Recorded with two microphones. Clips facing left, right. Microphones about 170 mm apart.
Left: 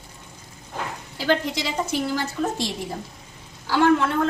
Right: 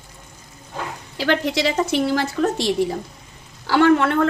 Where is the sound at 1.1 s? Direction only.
75° right (ahead or behind).